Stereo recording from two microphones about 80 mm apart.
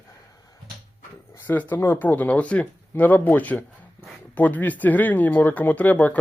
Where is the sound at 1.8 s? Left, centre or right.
Left.